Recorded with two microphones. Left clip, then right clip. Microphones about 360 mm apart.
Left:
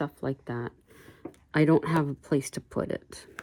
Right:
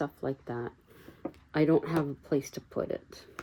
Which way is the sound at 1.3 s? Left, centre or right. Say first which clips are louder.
Left 3 dB; left.